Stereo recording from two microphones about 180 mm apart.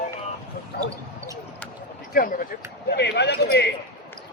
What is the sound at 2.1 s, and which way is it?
Speech, 50° left (ahead or behind).